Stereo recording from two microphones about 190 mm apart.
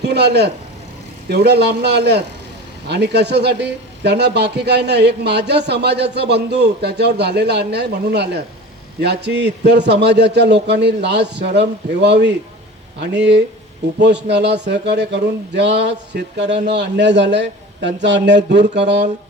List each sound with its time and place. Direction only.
0.0 s a man's voice: 60° right (ahead or behind)
14.0 s a man's voice: 65° right (ahead or behind)